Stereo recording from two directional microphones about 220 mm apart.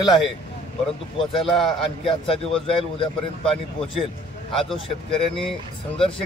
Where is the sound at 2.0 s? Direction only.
25° left (ahead or behind).